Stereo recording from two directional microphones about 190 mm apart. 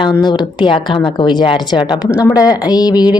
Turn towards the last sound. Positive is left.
turn(degrees=20)  # may be behind; listen again after turning